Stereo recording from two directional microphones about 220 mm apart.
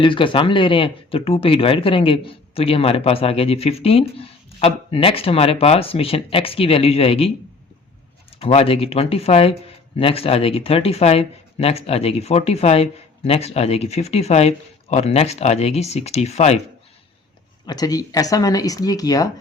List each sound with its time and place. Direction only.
0.0 s speech: 25° left (ahead or behind)
8.3 s speech: 25° left (ahead or behind)
17.7 s speech: 15° left (ahead or behind)